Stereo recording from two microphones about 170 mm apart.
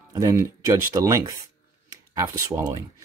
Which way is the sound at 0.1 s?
20° right (ahead or behind).